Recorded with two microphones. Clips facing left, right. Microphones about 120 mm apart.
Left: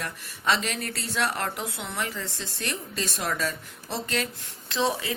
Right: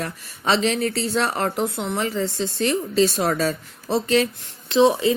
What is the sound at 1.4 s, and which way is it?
Speech, 35° right (ahead or behind).